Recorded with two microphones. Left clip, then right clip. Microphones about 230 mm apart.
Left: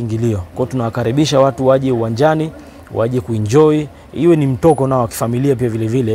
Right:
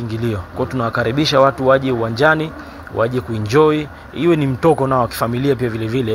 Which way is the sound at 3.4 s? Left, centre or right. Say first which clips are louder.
Left 2 dB; left.